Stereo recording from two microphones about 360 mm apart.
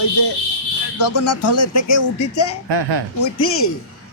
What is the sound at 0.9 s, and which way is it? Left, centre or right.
Speech, left.